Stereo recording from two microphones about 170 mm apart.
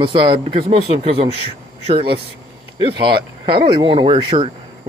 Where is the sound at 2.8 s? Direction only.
30° right (ahead or behind).